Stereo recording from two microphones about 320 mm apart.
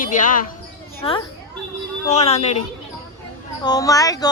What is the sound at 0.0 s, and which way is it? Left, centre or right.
A woman's voice, left.